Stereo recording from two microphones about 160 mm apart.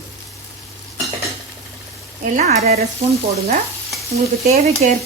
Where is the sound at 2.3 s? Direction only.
45° right (ahead or behind).